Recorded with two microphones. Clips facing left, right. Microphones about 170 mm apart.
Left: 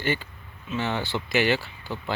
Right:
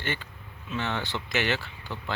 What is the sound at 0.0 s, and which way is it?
Speech, 10° left (ahead or behind).